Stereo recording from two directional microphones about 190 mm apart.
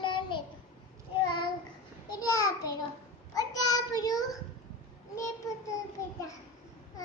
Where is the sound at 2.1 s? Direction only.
20° left (ahead or behind).